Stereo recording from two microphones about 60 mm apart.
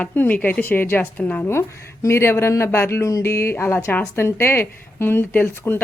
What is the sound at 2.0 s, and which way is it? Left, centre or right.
Speech, left.